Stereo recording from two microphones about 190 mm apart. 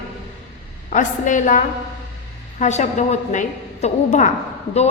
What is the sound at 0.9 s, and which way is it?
A woman's voice, 40° left (ahead or behind).